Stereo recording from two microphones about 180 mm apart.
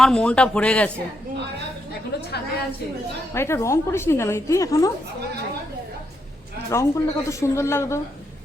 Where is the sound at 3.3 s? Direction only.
15° left (ahead or behind).